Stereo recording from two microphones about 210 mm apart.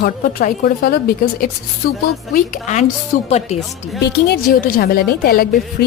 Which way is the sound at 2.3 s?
35° left (ahead or behind).